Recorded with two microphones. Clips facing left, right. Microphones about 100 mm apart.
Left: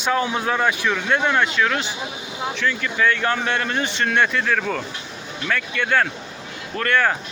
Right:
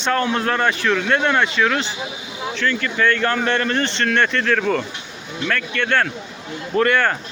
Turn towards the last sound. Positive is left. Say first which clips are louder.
# right 3 dB
turn(degrees=5)  # may be behind; listen again after turning